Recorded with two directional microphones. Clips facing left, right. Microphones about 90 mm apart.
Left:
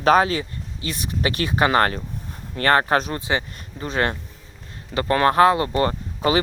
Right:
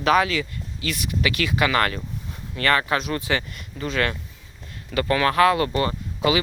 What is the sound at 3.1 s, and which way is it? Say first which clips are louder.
Speech: left 1 dB; 25° left (ahead or behind).